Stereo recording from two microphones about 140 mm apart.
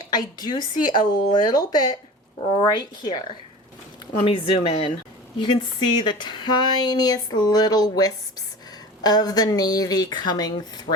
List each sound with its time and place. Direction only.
0.0 s speech: 30° left (ahead or behind)
4.2 s speech: 45° left (ahead or behind)
5.4 s speech: 35° left (ahead or behind)